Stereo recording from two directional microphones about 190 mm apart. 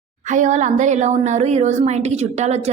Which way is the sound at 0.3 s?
40° right (ahead or behind).